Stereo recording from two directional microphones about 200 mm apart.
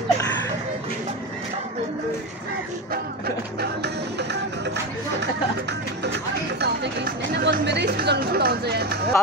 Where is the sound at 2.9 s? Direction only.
50° right (ahead or behind).